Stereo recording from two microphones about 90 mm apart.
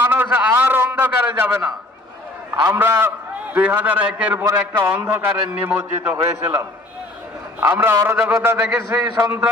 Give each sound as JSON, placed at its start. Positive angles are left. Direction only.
{"t": 0.0, "sound": "a sound", "side_deg": -20}
{"t": 2.6, "sound": "a man's voice", "side_deg": -25}
{"t": 7.6, "sound": "a man's voice", "side_deg": -30}